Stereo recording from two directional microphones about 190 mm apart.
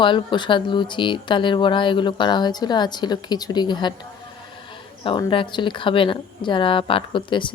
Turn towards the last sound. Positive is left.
turn(degrees=25)  # may be behind; listen again after turning